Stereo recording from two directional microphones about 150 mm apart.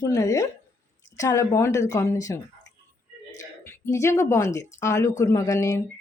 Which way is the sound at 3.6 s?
20° left (ahead or behind).